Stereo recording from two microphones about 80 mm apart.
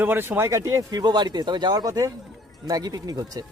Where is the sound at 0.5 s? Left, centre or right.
Right.